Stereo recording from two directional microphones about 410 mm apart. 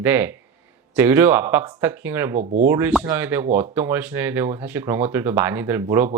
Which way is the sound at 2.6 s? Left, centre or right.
Centre.